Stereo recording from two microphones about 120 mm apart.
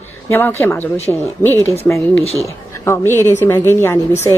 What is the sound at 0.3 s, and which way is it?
Speech, 15° left (ahead or behind).